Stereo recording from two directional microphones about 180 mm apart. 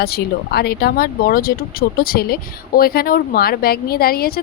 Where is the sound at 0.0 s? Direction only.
60° left (ahead or behind).